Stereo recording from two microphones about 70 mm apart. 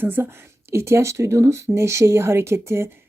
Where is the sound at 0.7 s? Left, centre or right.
Right.